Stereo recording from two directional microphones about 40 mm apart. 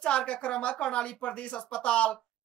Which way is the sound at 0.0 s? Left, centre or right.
Left.